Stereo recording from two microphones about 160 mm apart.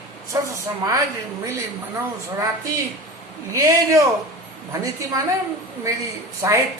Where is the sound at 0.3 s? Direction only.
20° right (ahead or behind).